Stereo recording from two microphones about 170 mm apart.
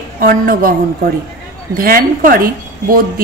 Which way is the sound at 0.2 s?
55° right (ahead or behind).